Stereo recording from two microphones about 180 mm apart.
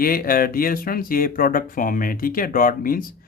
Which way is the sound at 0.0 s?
55° left (ahead or behind).